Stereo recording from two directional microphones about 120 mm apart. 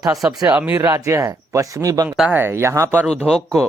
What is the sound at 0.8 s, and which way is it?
Speech, 30° right (ahead or behind).